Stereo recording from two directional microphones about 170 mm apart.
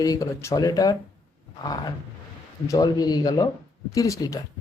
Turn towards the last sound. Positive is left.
turn(degrees=20)  # may be behind; listen again after turning